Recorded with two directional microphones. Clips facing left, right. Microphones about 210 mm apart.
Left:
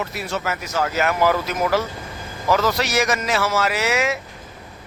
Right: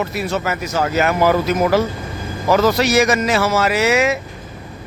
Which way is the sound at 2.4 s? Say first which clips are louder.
Right 5 dB; 35° right (ahead or behind).